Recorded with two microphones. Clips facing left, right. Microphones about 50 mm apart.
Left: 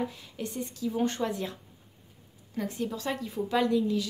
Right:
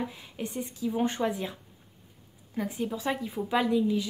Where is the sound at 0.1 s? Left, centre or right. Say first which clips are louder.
Right 1 dB; right.